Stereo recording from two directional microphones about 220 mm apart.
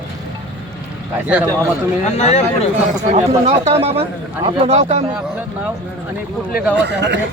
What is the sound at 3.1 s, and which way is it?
Speech, 30° right (ahead or behind).